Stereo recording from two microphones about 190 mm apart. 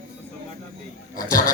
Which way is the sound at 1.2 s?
45° left (ahead or behind).